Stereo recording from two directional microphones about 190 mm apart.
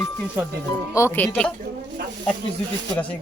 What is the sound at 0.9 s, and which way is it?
Speech, 10° left (ahead or behind).